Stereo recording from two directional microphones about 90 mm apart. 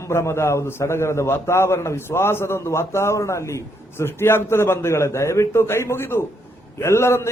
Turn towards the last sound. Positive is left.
turn(degrees=30)  # may be behind; listen again after turning